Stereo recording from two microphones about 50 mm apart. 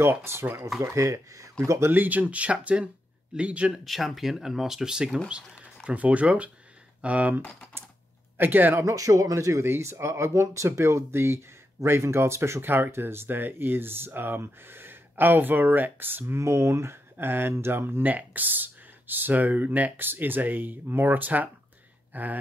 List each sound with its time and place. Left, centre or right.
0.2 s speech: right
0.8 s speech: right
1.9 s speech: right
3.8 s speech: centre
5.9 s speech: right
8.4 s speech: right
8.8 s speech: right
12.6 s speech: right
16.3 s speech: right
18.1 s speech: right